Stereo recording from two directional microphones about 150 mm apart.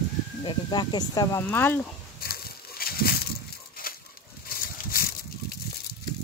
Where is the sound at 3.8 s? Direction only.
80° left.